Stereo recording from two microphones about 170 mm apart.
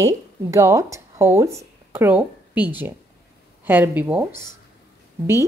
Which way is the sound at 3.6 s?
10° right (ahead or behind).